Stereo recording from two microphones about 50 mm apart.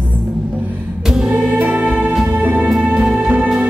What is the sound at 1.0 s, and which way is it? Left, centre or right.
Music, centre.